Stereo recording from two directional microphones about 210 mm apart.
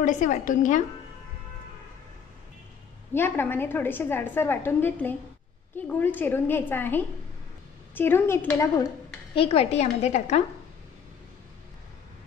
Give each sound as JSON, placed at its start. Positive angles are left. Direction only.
{"t": 0.0, "sound": "a woman's voice", "side_deg": 35}
{"t": 3.1, "sound": "a woman's voice", "side_deg": 10}